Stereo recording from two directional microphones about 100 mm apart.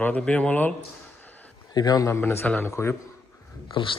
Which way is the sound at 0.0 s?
15° left (ahead or behind).